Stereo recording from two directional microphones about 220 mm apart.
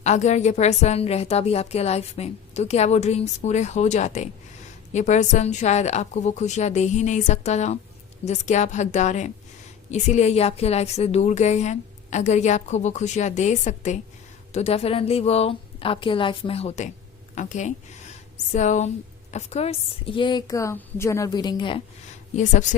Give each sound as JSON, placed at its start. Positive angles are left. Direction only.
{"t": 0.0, "sound": "a woman's voice", "side_deg": 30}